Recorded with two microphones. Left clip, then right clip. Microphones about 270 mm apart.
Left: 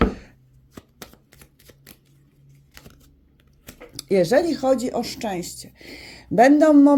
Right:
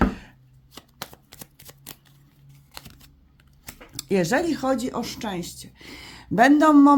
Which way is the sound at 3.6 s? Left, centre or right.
Centre.